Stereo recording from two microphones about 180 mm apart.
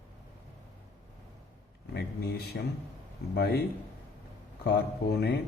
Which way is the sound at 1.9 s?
60° left (ahead or behind).